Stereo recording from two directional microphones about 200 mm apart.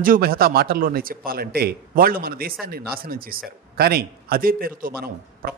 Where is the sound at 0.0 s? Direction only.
45° right (ahead or behind).